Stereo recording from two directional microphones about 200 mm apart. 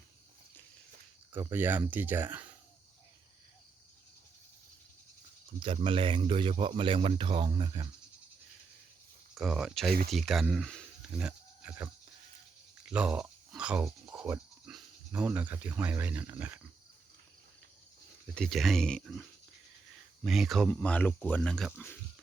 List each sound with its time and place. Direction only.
1.3 s speech: 10° right (ahead or behind)
5.5 s speech: 25° right (ahead or behind)
9.3 s speech: centre (ahead or behind)
18.3 s speech: centre (ahead or behind)